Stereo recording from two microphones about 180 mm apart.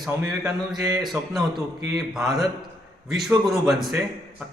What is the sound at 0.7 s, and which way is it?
Speech, 20° right (ahead or behind).